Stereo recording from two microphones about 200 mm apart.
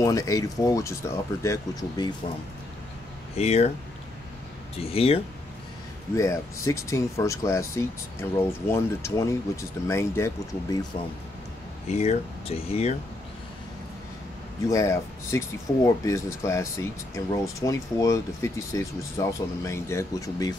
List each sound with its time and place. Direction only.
0.0 s speech: 15° left (ahead or behind)
3.3 s speech: 30° left (ahead or behind)
4.7 s speech: 30° left (ahead or behind)
6.1 s speech: 15° left (ahead or behind)
11.9 s speech: 30° left (ahead or behind)
14.7 s speech: 15° left (ahead or behind)